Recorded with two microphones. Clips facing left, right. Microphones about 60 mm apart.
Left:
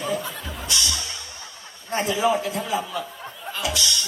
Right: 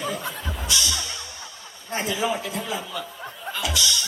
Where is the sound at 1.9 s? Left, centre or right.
Left.